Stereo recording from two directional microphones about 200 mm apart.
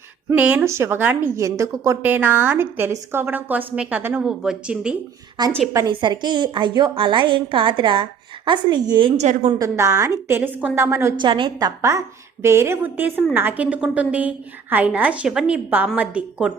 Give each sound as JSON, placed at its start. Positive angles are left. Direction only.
{"t": 0.3, "sound": "a woman's voice", "side_deg": -10}
{"t": 5.4, "sound": "a woman's voice", "side_deg": -20}
{"t": 9.6, "sound": "a woman's voice", "side_deg": -15}
{"t": 11.3, "sound": "a woman's voice", "side_deg": -25}